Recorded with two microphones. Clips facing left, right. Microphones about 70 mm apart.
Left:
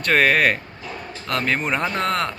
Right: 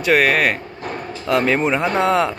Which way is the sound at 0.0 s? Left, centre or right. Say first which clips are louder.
Right 2 dB; centre.